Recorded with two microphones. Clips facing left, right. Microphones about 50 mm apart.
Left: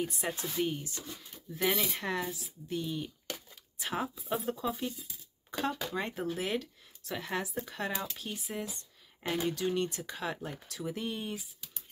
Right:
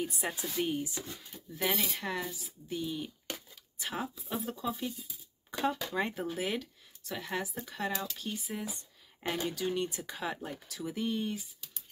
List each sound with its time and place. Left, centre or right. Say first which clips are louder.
0.0 s speech: left 1 dB; centre
7.9 s speech: even; centre
8.2 s speech: even; centre